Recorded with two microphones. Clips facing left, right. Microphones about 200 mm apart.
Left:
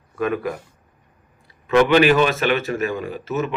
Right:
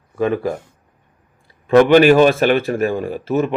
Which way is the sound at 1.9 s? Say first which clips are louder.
Right 5 dB; 45° right (ahead or behind).